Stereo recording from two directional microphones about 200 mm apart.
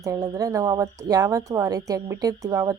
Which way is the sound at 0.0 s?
15° right (ahead or behind).